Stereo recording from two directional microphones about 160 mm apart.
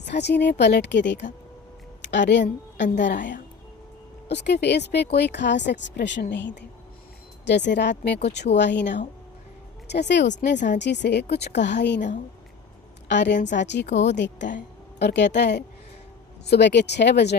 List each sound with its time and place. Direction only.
0.0 s a woman's voice: 90° left
4.3 s speech: 90° left
13.1 s a woman's voice: 90° left